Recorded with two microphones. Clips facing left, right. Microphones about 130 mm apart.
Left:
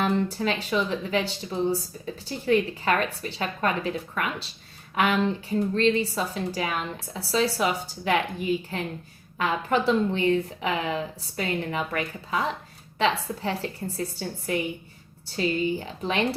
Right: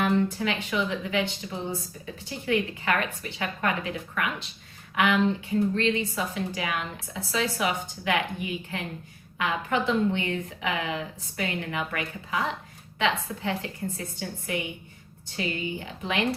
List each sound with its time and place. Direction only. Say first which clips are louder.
0.0 s a woman's voice: even; 35° left (ahead or behind)